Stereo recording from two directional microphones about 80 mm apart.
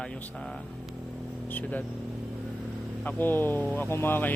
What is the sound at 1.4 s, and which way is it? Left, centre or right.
Speech, left.